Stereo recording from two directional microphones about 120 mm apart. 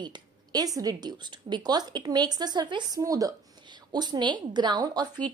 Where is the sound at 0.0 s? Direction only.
35° right (ahead or behind).